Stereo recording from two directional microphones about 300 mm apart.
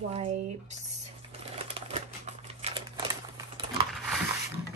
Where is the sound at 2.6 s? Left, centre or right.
Centre.